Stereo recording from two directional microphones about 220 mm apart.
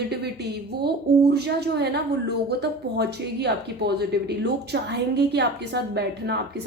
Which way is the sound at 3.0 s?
50° right (ahead or behind).